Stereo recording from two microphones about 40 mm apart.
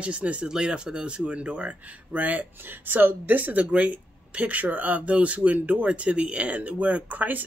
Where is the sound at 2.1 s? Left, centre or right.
Right.